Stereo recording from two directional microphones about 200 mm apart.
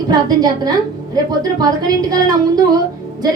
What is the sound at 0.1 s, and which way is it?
A woman's voice, 20° right (ahead or behind).